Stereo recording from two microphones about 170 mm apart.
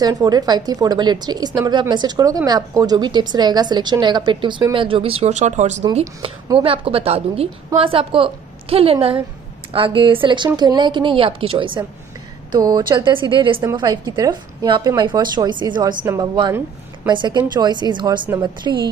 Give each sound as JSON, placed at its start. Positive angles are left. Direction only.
{"t": 0.0, "sound": "speech", "side_deg": -25}
{"t": 6.6, "sound": "a woman's voice", "side_deg": -35}